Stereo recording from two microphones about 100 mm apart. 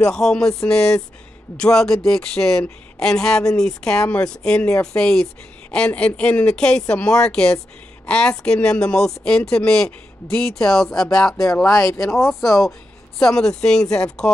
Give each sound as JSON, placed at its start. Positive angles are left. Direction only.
{"t": 0.1, "sound": "speech", "side_deg": 5}
{"t": 11.7, "sound": "speech", "side_deg": 30}
{"t": 12.1, "sound": "speech", "side_deg": 0}